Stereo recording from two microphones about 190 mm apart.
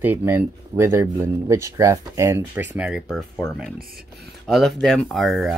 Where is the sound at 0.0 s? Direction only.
10° right (ahead or behind).